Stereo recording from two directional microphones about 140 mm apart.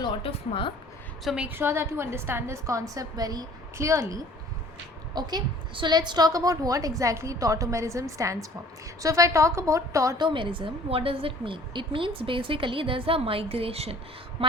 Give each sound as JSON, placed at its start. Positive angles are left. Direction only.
{"t": 0.0, "sound": "a woman's voice", "side_deg": 40}
{"t": 1.2, "sound": "a woman's voice", "side_deg": 0}
{"t": 1.5, "sound": "a woman's voice", "side_deg": -15}
{"t": 5.1, "sound": "a woman's voice", "side_deg": -30}
{"t": 10.2, "sound": "a woman's voice", "side_deg": -35}